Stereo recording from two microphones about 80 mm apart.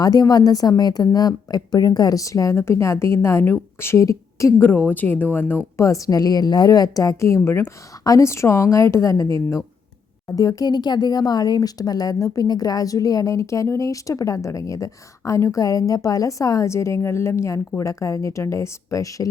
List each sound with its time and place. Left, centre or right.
0.0 s a woman's voice: left
4.5 s speech: left
5.7 s a woman's voice: left
8.0 s a woman's voice: left